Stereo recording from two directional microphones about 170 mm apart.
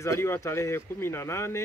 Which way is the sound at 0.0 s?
15° left (ahead or behind).